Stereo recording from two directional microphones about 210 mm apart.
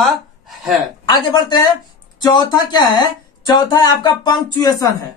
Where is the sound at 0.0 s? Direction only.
Centre (ahead or behind).